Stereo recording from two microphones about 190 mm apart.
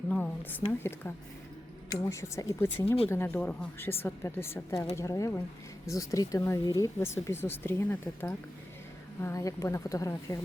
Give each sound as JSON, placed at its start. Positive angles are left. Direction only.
{"t": 0.1, "sound": "a woman's voice", "side_deg": 10}
{"t": 2.8, "sound": "speech", "side_deg": 30}
{"t": 3.1, "sound": "speech", "side_deg": 15}